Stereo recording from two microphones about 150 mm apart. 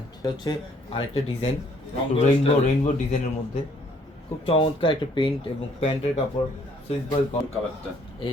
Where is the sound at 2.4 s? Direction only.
50° left (ahead or behind).